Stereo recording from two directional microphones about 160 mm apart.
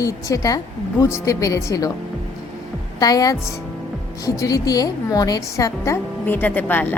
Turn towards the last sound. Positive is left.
turn(degrees=10)  # may be behind; listen again after turning